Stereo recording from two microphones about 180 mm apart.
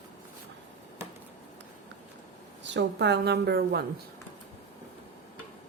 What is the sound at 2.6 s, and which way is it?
A woman's voice, 75° right (ahead or behind).